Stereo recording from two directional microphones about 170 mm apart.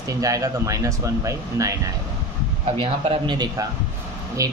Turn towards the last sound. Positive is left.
turn(degrees=-20)  # may be behind; listen again after turning